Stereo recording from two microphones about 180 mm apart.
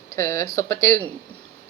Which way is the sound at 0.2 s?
15° left (ahead or behind).